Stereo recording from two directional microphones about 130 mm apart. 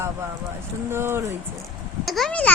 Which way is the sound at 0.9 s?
20° right (ahead or behind).